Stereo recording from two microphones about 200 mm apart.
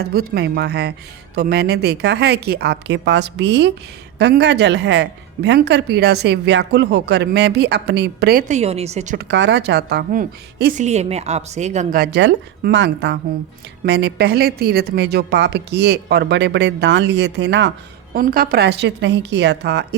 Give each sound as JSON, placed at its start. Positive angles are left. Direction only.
{"t": 0.0, "sound": "speech", "side_deg": -50}
{"t": 9.1, "sound": "a woman's voice", "side_deg": -60}
{"t": 18.1, "sound": "speech", "side_deg": -45}